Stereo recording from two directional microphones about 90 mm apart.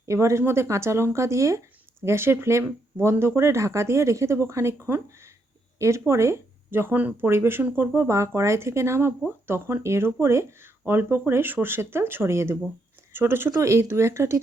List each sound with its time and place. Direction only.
0.0 s speech: 35° right (ahead or behind)